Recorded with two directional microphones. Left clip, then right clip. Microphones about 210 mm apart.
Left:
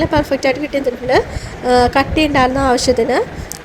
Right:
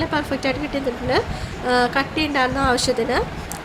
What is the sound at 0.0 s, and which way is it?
A woman's voice, 20° left (ahead or behind).